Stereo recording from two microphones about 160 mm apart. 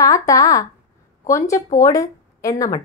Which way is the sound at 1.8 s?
20° left (ahead or behind).